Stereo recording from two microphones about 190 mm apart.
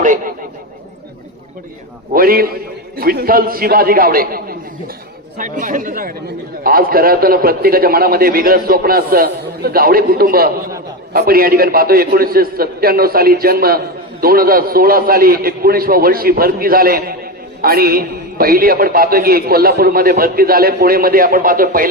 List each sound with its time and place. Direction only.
0.0 s speech: 45° right (ahead or behind)
2.1 s a man's voice: 50° right (ahead or behind)